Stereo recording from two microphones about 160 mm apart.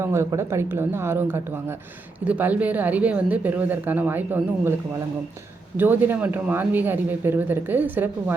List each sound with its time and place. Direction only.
0.0 s speech: 15° right (ahead or behind)
5.7 s speech: 10° right (ahead or behind)